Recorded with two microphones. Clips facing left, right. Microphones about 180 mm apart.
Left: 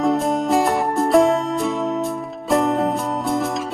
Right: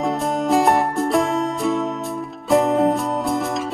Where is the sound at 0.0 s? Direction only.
Centre (ahead or behind).